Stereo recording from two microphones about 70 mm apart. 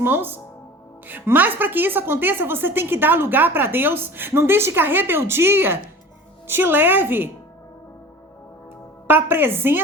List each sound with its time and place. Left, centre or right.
0.0 s a woman's voice: right
9.0 s a woman's voice: right